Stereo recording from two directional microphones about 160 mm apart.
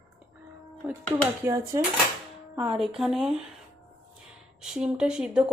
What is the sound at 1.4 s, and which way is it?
Cutlery, 20° right (ahead or behind).